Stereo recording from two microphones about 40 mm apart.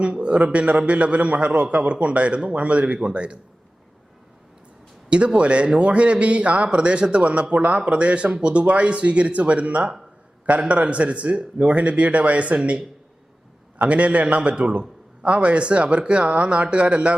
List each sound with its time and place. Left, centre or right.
0.0 s a man's voice: right
5.0 s a man's voice: right